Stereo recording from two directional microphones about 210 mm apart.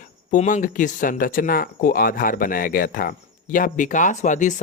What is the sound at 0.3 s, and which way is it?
Speech, 40° left (ahead or behind).